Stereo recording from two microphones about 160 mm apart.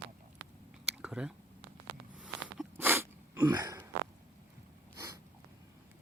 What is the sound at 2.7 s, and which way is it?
Sneeze, 15° right (ahead or behind).